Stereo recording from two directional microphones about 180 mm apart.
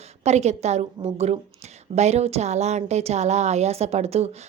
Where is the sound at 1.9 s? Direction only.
35° right (ahead or behind).